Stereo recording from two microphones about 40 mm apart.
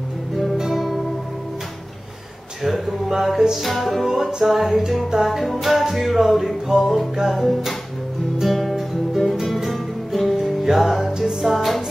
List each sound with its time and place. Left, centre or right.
0.6 s music: centre
2.6 s a sound: centre
3.6 s music: centre
11.1 s music: centre
11.5 s music: centre